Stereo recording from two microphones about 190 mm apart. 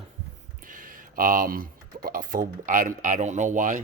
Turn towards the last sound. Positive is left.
turn(degrees=-45)  # may be behind; listen again after turning